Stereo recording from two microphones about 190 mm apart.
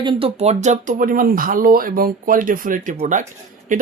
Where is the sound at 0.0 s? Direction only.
25° right (ahead or behind).